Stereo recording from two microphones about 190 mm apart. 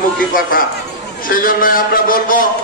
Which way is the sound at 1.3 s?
45° left (ahead or behind).